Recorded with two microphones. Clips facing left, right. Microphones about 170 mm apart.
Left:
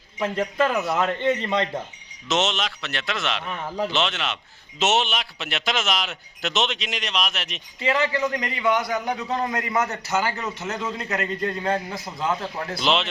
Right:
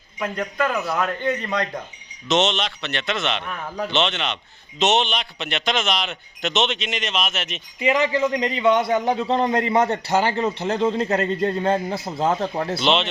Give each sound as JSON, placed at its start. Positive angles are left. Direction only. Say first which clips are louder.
{"t": 0.2, "sound": "a man's voice", "louder": "left 2 dB", "side_deg": 25}
{"t": 2.2, "sound": "a man's voice", "louder": "right 3 dB", "side_deg": 0}
{"t": 7.8, "sound": "a man's voice", "louder": "right 3 dB", "side_deg": -20}
{"t": 12.8, "sound": "a man's voice", "louder": "right 2 dB", "side_deg": 0}